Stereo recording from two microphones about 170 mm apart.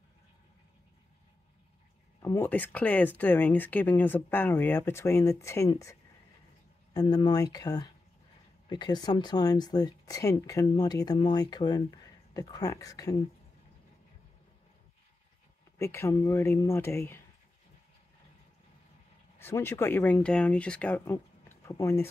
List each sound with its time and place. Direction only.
2.2 s speech: 15° left (ahead or behind)
15.8 s speech: 15° left (ahead or behind)
19.3 s speech: 15° left (ahead or behind)